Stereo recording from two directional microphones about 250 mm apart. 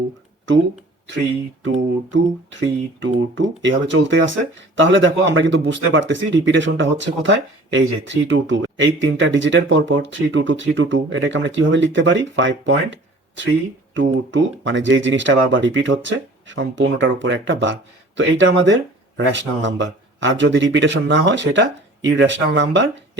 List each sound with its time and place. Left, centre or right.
1.6 s speech: right